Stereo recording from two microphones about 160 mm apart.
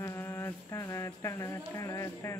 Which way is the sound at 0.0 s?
20° left (ahead or behind).